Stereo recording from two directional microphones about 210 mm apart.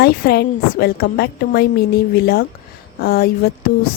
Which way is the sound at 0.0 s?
50° left (ahead or behind).